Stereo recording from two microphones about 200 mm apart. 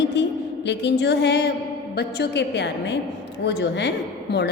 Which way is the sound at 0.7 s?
60° left (ahead or behind).